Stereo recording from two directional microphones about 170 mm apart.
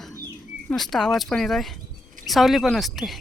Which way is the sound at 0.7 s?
Centre (ahead or behind).